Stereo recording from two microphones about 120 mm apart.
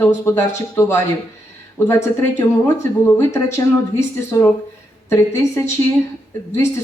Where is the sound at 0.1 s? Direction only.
25° left (ahead or behind).